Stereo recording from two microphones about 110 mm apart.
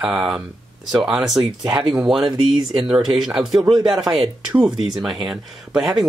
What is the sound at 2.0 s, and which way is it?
Speech, 5° right (ahead or behind).